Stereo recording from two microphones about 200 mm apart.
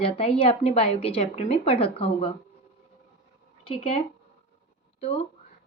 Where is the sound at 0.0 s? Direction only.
30° left (ahead or behind).